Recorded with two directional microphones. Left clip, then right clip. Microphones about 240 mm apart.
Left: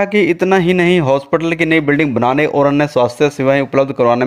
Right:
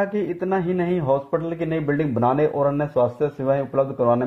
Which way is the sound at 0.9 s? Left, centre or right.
Left.